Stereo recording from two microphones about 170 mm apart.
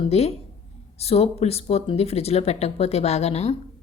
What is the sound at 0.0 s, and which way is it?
A woman's voice, 35° left (ahead or behind).